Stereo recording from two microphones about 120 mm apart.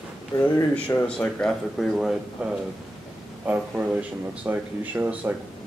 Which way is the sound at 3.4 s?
15° right (ahead or behind).